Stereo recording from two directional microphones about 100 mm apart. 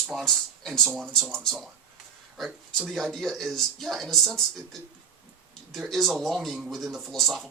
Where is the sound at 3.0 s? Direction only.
5° left (ahead or behind).